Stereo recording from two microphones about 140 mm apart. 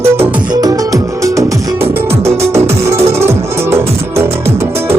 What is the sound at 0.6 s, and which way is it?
Music, 25° right (ahead or behind).